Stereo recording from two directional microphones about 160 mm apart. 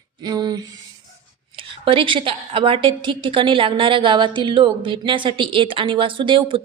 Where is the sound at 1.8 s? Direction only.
35° right (ahead or behind).